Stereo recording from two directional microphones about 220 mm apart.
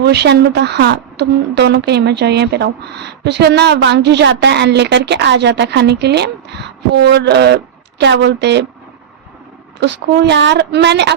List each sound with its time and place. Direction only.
0.0 s speech: 50° right (ahead or behind)
9.8 s speech: 55° right (ahead or behind)